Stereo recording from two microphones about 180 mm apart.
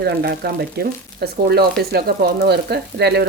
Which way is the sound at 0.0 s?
60° right (ahead or behind).